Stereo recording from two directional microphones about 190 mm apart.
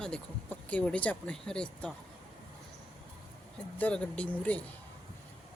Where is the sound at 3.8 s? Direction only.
5° left (ahead or behind).